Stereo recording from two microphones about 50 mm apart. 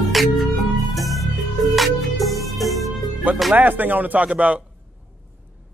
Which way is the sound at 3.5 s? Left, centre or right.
Right.